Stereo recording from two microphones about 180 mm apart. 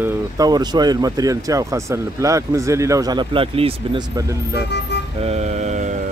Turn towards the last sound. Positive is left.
turn(degrees=-40)  # may be behind; listen again after turning